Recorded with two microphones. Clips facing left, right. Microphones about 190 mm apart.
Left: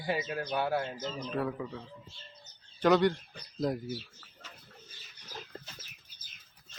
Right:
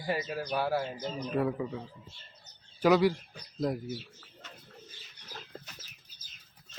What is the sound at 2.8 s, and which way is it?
Speech, 5° right (ahead or behind).